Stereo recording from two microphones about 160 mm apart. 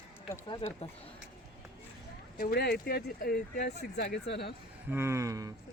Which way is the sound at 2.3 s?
70° left (ahead or behind).